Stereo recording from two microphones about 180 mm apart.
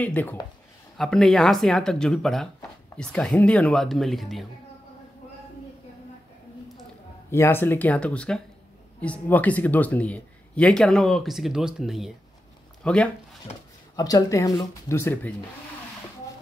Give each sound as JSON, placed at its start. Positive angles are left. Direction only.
{"t": 0.0, "sound": "speech", "side_deg": 10}
{"t": 7.2, "sound": "speech", "side_deg": 15}
{"t": 13.9, "sound": "speech", "side_deg": 20}